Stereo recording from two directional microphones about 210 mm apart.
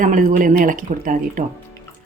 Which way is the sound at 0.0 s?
40° right (ahead or behind).